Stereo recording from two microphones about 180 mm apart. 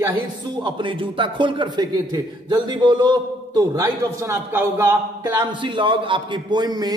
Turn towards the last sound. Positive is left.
turn(degrees=-20)  # may be behind; listen again after turning